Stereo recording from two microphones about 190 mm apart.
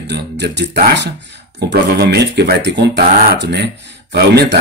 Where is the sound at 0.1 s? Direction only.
65° right (ahead or behind).